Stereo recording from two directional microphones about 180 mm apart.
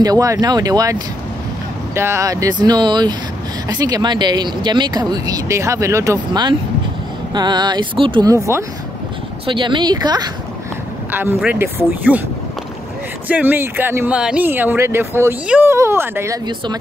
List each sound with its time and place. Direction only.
0.0 s speech: 20° right (ahead or behind)
9.5 s speech: 25° right (ahead or behind)
11.1 s speech: 10° right (ahead or behind)
13.3 s speech: 10° right (ahead or behind)